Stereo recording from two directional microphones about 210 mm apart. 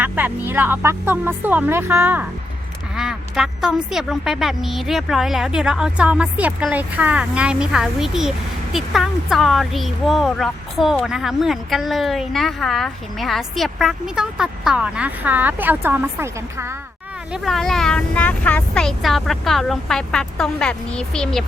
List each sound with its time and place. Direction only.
0.0 s speech: 10° right (ahead or behind)
17.3 s speech: centre (ahead or behind)